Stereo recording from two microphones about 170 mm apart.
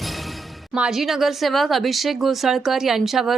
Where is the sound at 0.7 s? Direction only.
Centre (ahead or behind).